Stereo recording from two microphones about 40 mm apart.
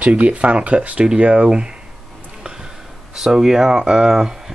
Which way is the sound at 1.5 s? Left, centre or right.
Right.